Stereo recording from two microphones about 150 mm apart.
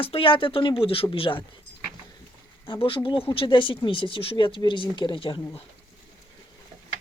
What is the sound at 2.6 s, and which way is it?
Speech, 35° left (ahead or behind).